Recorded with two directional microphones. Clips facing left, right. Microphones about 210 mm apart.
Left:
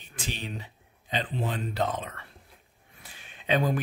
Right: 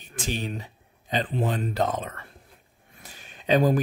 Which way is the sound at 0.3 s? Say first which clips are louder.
Right 6 dB; 45° right (ahead or behind).